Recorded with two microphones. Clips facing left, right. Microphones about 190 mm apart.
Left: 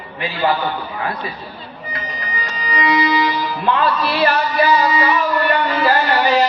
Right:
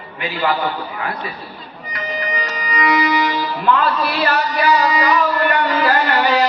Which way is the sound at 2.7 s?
30° left (ahead or behind).